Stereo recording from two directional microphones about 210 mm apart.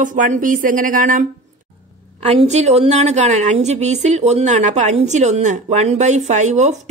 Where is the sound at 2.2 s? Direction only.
30° right (ahead or behind).